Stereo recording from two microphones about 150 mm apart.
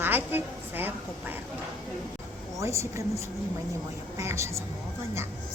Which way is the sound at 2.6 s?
20° right (ahead or behind).